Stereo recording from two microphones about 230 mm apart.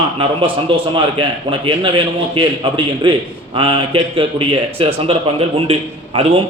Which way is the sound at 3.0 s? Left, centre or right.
Right.